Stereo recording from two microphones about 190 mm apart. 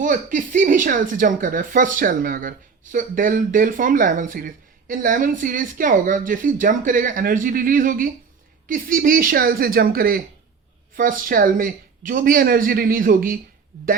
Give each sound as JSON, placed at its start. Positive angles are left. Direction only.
{"t": 0.0, "sound": "speech", "side_deg": -45}